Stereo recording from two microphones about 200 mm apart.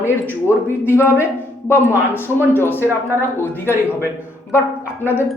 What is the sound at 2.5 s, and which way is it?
Speech, 10° left (ahead or behind).